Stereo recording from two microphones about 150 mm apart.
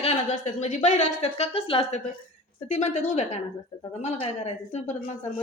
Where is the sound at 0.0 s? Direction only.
45° left (ahead or behind).